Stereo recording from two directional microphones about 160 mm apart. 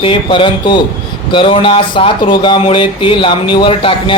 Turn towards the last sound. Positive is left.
turn(degrees=30)  # may be behind; listen again after turning